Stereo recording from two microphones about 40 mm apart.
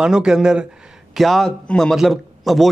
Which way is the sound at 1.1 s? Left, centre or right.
Centre.